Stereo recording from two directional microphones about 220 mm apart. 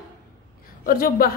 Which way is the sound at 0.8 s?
40° left (ahead or behind).